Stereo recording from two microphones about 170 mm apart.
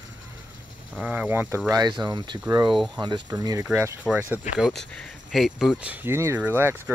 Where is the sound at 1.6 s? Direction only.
25° right (ahead or behind).